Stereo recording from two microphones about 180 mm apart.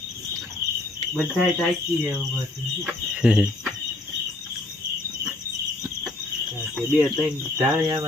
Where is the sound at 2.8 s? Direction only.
5° right (ahead or behind).